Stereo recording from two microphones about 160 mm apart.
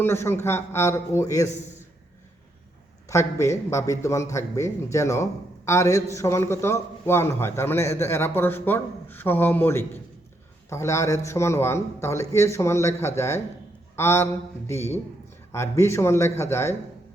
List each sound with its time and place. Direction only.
0.0 s a man's voice: 15° left (ahead or behind)
3.1 s a man's voice: 20° left (ahead or behind)